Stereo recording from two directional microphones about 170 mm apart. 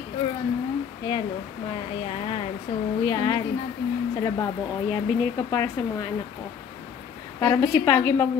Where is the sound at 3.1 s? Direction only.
20° left (ahead or behind).